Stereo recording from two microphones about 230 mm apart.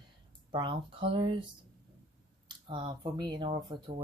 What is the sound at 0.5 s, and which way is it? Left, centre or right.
Speech, right.